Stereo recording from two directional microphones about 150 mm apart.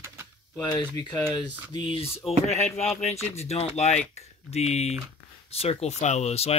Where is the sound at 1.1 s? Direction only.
20° left (ahead or behind).